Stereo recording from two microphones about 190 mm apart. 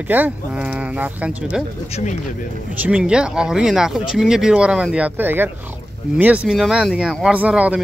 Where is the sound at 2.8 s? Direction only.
5° right (ahead or behind).